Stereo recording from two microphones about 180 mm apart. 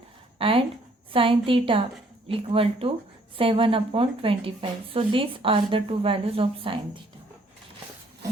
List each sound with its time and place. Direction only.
0.3 s speech: 30° right (ahead or behind)